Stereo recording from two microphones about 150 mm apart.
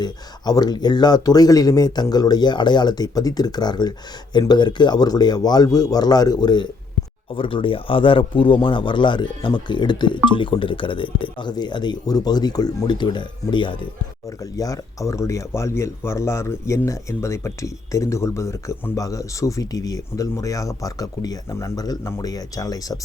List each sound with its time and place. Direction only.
0.0 s speech: 25° left (ahead or behind)